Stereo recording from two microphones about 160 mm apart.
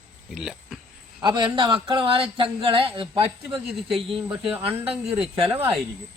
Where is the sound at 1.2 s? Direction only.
30° right (ahead or behind).